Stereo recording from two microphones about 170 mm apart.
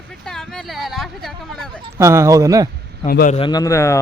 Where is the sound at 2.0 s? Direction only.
15° right (ahead or behind).